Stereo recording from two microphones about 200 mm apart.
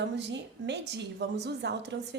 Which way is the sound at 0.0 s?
60° right (ahead or behind).